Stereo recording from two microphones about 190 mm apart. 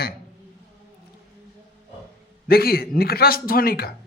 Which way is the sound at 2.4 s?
55° left (ahead or behind).